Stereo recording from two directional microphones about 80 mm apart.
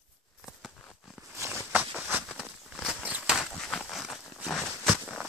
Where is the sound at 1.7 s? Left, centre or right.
Centre.